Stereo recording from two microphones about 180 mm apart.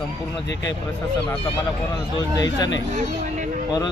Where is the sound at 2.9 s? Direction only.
40° right (ahead or behind).